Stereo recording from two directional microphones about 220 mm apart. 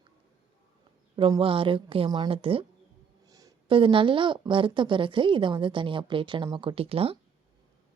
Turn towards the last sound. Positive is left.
turn(degrees=-25)  # may be behind; listen again after turning